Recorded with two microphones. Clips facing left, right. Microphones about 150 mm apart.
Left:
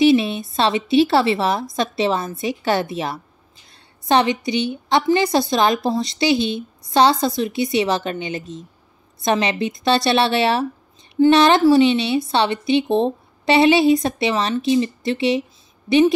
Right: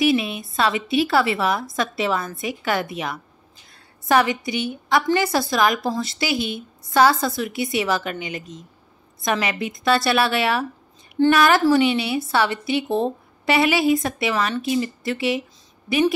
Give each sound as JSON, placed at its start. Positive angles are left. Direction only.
{"t": 0.0, "sound": "a woman's voice", "side_deg": 25}